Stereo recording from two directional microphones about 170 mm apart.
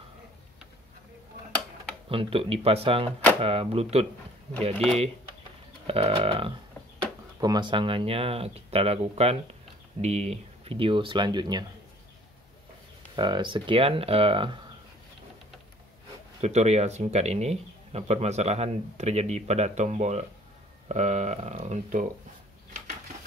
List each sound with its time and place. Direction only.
2.0 s speech: 35° right (ahead or behind)
5.9 s speech: 35° right (ahead or behind)
13.1 s speech: 25° right (ahead or behind)
16.3 s speech: 40° right (ahead or behind)